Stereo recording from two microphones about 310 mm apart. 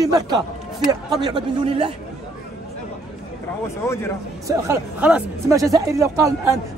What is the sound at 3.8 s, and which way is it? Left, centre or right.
Speech, centre.